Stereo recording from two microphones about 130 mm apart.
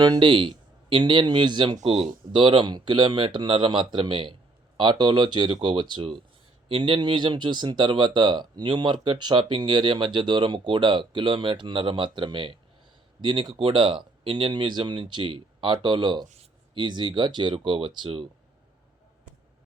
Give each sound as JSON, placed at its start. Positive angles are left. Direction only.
{"t": 0.0, "sound": "speech", "side_deg": -35}
{"t": 1.8, "sound": "speech", "side_deg": -45}